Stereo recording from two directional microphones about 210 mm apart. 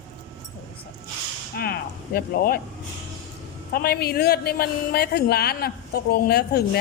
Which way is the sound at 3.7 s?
50° left (ahead or behind).